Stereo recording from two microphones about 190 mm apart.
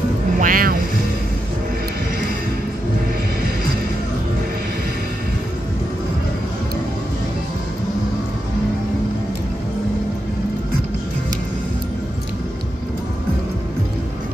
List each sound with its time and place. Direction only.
0.4 s speech: 45° right (ahead or behind)